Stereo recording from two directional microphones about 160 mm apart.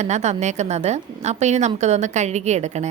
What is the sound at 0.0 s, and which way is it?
A woman's voice, 45° right (ahead or behind).